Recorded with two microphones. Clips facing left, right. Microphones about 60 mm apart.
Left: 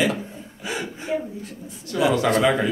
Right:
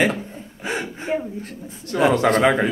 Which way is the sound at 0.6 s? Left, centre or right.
Right.